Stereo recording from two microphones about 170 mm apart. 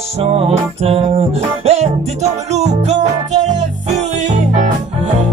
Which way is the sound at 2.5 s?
40° right (ahead or behind).